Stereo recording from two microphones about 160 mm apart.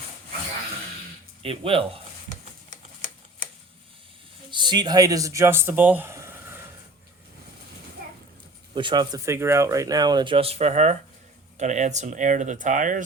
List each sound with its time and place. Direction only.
1.4 s speech: 35° right (ahead or behind)
4.5 s speech: 30° right (ahead or behind)
8.7 s speech: 30° right (ahead or behind); by 13.0 s 55° right (ahead or behind)